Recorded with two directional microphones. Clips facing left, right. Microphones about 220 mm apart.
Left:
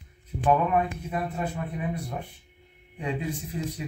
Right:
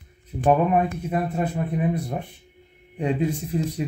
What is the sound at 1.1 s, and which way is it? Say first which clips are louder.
Speech: right 5 dB; 35° right (ahead or behind).